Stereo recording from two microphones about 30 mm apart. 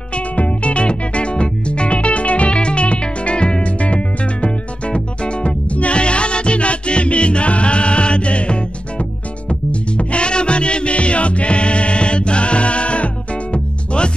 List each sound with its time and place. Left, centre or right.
0.1 s music: left
3.6 s music: left